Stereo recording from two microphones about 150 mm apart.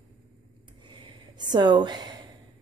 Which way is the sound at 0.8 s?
35° right (ahead or behind).